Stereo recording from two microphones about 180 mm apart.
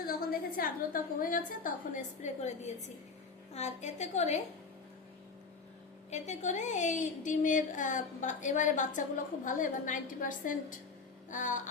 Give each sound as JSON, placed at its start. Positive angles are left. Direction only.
{"t": 0.2, "sound": "a sound", "side_deg": 55}
{"t": 1.2, "sound": "a woman's voice", "side_deg": 50}
{"t": 6.1, "sound": "a woman's voice", "side_deg": 40}